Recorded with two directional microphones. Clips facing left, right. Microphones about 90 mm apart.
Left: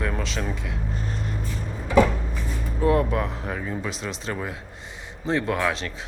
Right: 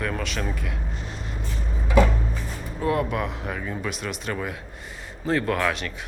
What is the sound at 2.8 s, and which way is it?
Speech, 30° left (ahead or behind).